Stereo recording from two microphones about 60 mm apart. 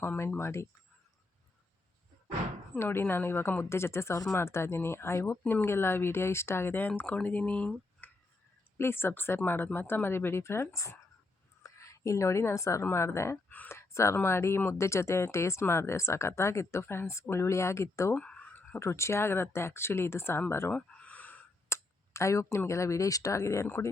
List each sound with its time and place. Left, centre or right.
0.3 s speech: left
2.7 s speech: left
6.8 s speech: left
8.8 s a woman's voice: left
12.8 s speech: left
13.7 s a sound: left
14.2 s speech: left
18.1 s a sound: left
18.8 s speech: left
20.7 s a sound: left
21.7 s speech: left